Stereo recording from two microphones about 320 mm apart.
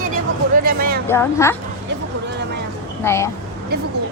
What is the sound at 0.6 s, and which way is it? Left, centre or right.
Music, right.